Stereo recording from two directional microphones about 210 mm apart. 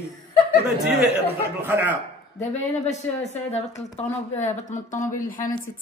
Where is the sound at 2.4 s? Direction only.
35° left (ahead or behind).